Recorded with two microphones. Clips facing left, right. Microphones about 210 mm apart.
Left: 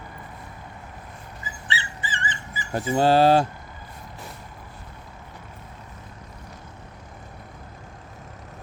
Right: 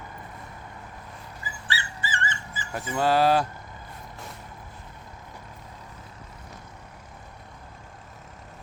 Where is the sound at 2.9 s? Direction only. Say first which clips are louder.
Left 4 dB; 30° left (ahead or behind).